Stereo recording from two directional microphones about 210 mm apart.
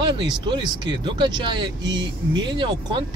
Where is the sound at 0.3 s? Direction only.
20° right (ahead or behind).